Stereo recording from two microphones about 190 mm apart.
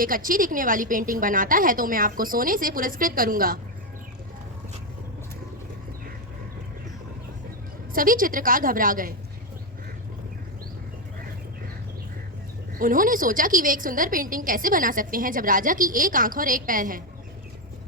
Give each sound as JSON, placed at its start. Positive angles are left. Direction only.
{"t": 0.0, "sound": "a woman's voice", "side_deg": -45}
{"t": 7.9, "sound": "a woman's voice", "side_deg": -45}
{"t": 12.8, "sound": "a woman's voice", "side_deg": -45}